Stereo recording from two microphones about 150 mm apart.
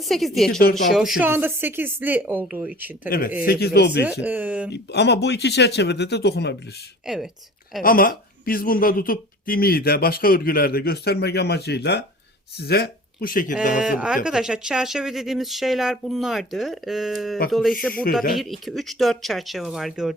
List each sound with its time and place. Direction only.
0.0 s speech: centre (ahead or behind)
1.3 s speech: 15° right (ahead or behind)
3.1 s speech: 75° left (ahead or behind)
3.4 s speech: 90° left
4.0 s speech: 10° right (ahead or behind)
5.6 s speech: 90° left
7.0 s speech: 5° right (ahead or behind)
7.8 s speech: 70° left (ahead or behind)
13.8 s speech: 5° right (ahead or behind)